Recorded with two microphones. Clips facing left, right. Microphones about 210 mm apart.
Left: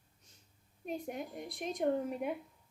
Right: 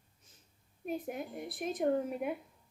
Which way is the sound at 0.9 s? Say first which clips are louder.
Right 2 dB; 5° right (ahead or behind).